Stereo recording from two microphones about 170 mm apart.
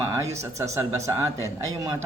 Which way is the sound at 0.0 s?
15° right (ahead or behind).